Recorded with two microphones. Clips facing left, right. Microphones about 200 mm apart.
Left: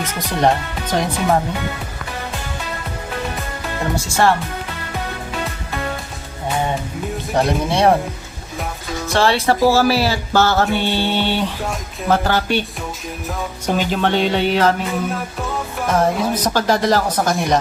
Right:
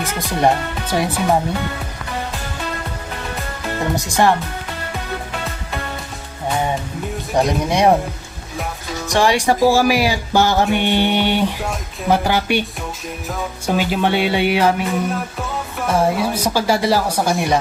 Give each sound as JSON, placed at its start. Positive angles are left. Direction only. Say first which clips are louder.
{"t": 0.0, "sound": "speech", "louder": "even", "side_deg": -10}
{"t": 3.9, "sound": "speech", "louder": "even", "side_deg": -15}
{"t": 7.3, "sound": "speech", "louder": "right 1 dB", "side_deg": -15}
{"t": 9.0, "sound": "speech", "louder": "right 1 dB", "side_deg": -15}
{"t": 13.7, "sound": "speech", "louder": "even", "side_deg": -10}
{"t": 15.1, "sound": "music", "louder": "right 1 dB", "side_deg": 0}
{"t": 15.9, "sound": "speech", "louder": "even", "side_deg": -5}